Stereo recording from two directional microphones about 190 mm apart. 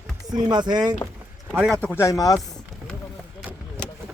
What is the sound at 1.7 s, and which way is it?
Speech, 5° left (ahead or behind).